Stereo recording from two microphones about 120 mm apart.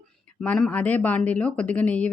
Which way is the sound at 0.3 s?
5° left (ahead or behind).